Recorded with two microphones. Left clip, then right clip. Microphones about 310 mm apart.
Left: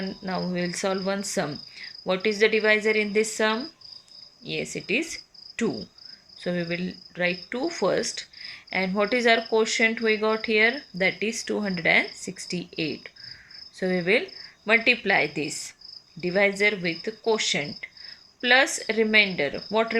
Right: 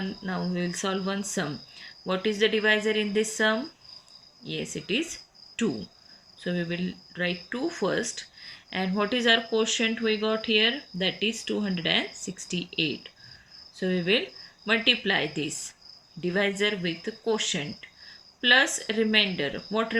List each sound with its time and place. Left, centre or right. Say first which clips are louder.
0.3 s speech: left 3 dB; centre
4.5 s cricket: left 3 dB; centre
6.4 s speech: left 3 dB; centre
13.7 s speech: left 2 dB; centre
16.2 s speech: left 4 dB; centre